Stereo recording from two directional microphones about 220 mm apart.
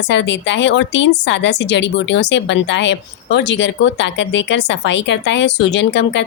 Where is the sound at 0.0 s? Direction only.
55° left (ahead or behind).